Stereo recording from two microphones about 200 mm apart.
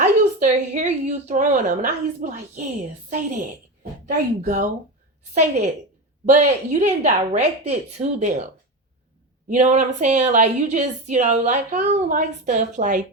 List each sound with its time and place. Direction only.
0.0 s a woman's voice: 35° right (ahead or behind)
9.5 s a woman's voice: 35° right (ahead or behind)